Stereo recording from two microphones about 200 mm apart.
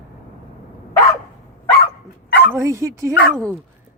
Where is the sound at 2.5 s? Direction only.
15° right (ahead or behind).